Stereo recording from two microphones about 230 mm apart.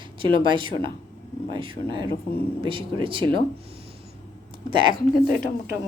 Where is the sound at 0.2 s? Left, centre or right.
Right.